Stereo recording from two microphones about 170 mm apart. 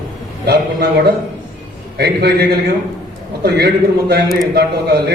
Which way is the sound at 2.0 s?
65° right (ahead or behind).